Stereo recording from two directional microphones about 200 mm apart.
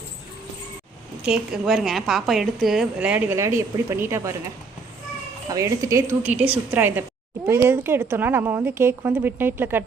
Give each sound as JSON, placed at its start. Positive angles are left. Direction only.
{"t": 1.2, "sound": "a woman's voice", "side_deg": 0}
{"t": 5.5, "sound": "speech", "side_deg": -15}